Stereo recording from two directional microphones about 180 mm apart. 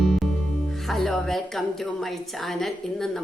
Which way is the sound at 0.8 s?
Centre (ahead or behind).